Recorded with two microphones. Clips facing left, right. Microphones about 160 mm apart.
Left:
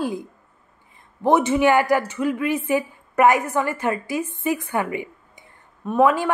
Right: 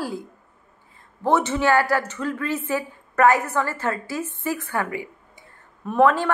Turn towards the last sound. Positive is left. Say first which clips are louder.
# even
turn(degrees=10)  # may be behind; listen again after turning